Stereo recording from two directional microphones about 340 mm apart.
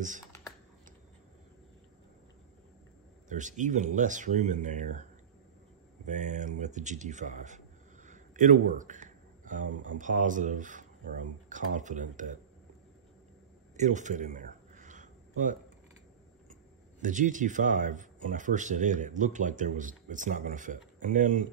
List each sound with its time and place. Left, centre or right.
3.3 s speech: right
6.0 s speech: right
13.7 s a sound: right
17.0 s speech: right